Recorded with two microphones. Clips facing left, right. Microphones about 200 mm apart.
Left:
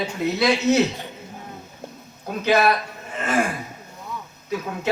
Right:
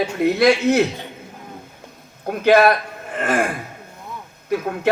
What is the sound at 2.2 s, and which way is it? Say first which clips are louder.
Speech: right 6 dB; 55° right (ahead or behind).